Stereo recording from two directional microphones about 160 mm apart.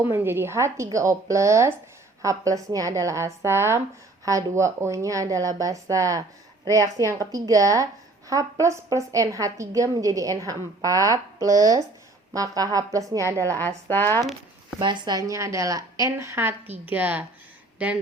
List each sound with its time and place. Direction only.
0.0 s a woman's voice: 15° right (ahead or behind)
13.9 s speech: 15° left (ahead or behind)
14.8 s a woman's voice: 30° right (ahead or behind); by 17.2 s 10° right (ahead or behind)